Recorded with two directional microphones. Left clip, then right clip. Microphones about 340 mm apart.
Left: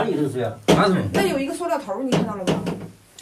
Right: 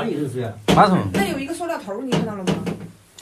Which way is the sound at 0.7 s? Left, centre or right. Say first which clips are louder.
Right 8 dB; centre.